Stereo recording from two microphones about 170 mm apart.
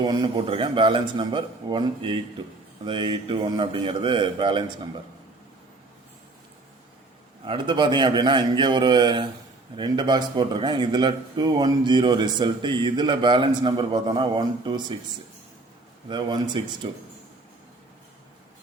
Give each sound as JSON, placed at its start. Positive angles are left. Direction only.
{"t": 0.0, "sound": "a man's voice", "side_deg": -25}
{"t": 7.4, "sound": "a man's voice", "side_deg": -30}
{"t": 16.0, "sound": "a man's voice", "side_deg": -25}